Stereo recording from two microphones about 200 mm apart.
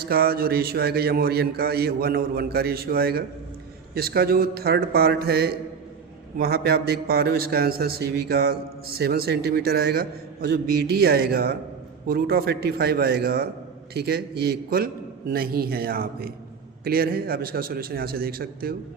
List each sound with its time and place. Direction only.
0.0 s a man's voice: 50° right (ahead or behind)